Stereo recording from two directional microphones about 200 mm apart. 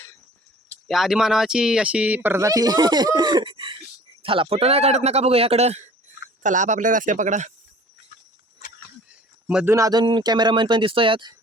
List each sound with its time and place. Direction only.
0.9 s speech: centre (ahead or behind); by 7.5 s 35° right (ahead or behind)
9.5 s speech: 5° right (ahead or behind)
9.7 s speech: 20° right (ahead or behind)